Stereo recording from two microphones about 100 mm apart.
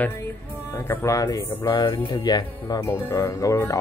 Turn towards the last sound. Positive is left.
turn(degrees=35)  # may be behind; listen again after turning